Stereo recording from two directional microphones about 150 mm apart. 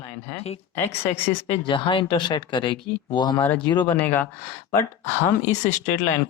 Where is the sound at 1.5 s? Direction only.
30° left (ahead or behind).